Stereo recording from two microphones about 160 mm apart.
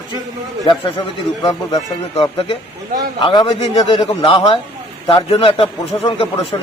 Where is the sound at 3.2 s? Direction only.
30° left (ahead or behind).